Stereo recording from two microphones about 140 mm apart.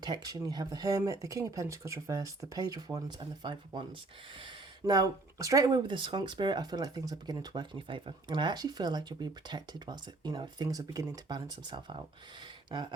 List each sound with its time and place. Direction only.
0.0 s speech: 30° right (ahead or behind)